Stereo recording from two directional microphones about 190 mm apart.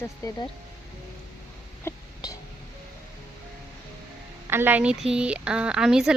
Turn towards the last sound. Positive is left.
turn(degrees=-5)  # may be behind; listen again after turning